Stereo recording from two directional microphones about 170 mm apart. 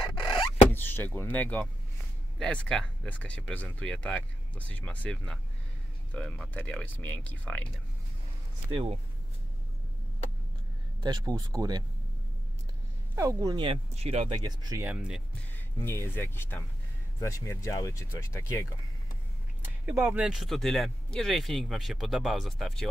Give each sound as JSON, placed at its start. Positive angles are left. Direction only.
{"t": 0.2, "sound": "a sound", "side_deg": 30}
{"t": 0.7, "sound": "speech", "side_deg": 10}
{"t": 11.0, "sound": "speech", "side_deg": -25}
{"t": 13.1, "sound": "speech", "side_deg": -20}
{"t": 14.3, "sound": "speech", "side_deg": -25}
{"t": 14.9, "sound": "speech", "side_deg": -5}
{"t": 15.5, "sound": "speech", "side_deg": 15}
{"t": 19.6, "sound": "speech", "side_deg": -5}